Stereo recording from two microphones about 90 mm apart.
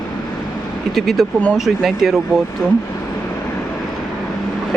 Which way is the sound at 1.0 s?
Centre (ahead or behind).